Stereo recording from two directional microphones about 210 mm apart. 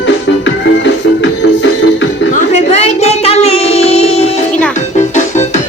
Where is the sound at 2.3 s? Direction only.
30° left (ahead or behind).